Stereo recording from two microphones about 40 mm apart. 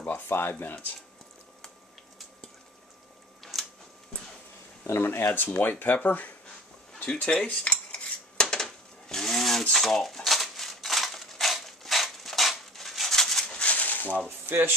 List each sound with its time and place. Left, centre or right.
0.1 s speech: left
4.9 s speech: left
5.9 s speech: left
7.1 s speech: left
7.4 s dishes: left; by 13.5 s centre
13.7 s a sound: left
14.5 s speech: right